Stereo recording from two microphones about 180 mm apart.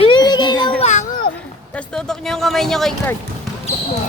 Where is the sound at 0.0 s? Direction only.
25° left (ahead or behind).